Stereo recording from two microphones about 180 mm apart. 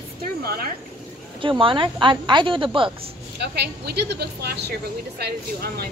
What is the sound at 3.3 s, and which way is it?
Speech, 65° right (ahead or behind).